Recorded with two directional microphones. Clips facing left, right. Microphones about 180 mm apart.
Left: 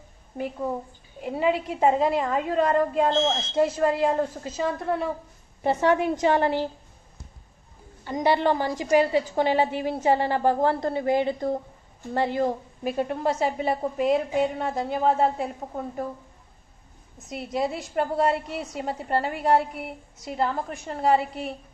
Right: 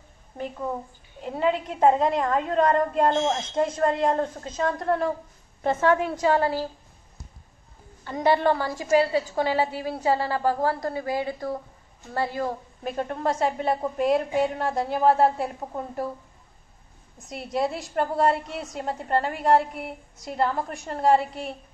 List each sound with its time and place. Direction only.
0.3 s a woman's voice: 5° left (ahead or behind)
3.2 s speech: 15° right (ahead or behind)
3.5 s a woman's voice: 5° left (ahead or behind)
5.6 s a woman's voice: 15° left (ahead or behind)
8.0 s a woman's voice: 15° left (ahead or behind); by 15.5 s centre (ahead or behind)
17.3 s a woman's voice: centre (ahead or behind)